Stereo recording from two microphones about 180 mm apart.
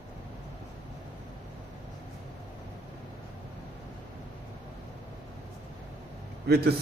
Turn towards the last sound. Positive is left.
turn(degrees=-60)  # may be behind; listen again after turning